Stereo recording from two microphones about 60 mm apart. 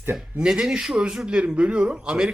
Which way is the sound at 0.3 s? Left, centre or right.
Centre.